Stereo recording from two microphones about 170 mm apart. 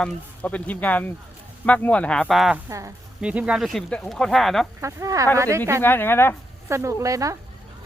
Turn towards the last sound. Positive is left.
turn(degrees=-20)  # may be behind; listen again after turning